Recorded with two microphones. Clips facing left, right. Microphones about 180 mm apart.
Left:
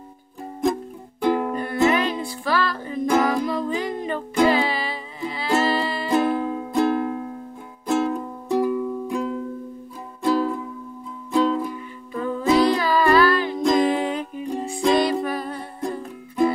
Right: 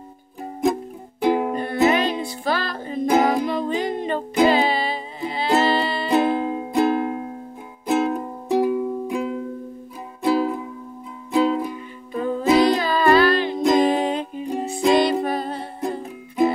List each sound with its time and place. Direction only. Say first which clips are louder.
1.2 s music: right 2 dB; 10° right (ahead or behind)
1.5 s music: right 1 dB; 25° right (ahead or behind)
8.5 s music: right 2 dB; 10° right (ahead or behind)
11.6 s music: right 1 dB; 25° right (ahead or behind)